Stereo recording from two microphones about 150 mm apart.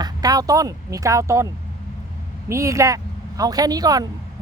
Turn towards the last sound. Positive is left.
turn(degrees=-25)  # may be behind; listen again after turning